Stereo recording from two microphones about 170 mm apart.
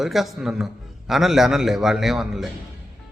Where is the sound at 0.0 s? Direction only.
Centre (ahead or behind).